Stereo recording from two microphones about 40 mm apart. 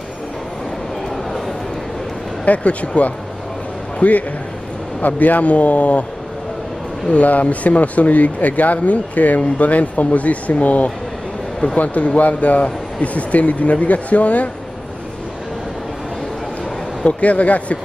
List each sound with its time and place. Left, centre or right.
2.4 s speech: left
7.1 s speech: left
17.2 s speech: left